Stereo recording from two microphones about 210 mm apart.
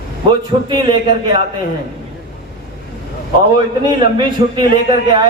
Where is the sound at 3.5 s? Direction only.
20° right (ahead or behind).